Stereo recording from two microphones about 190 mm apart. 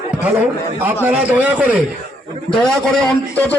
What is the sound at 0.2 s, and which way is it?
A man's voice, 10° right (ahead or behind).